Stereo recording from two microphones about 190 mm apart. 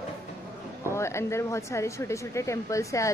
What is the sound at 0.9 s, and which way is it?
Speech, 15° left (ahead or behind).